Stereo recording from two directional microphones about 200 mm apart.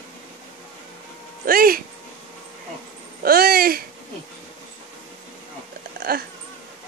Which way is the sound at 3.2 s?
50° right (ahead or behind).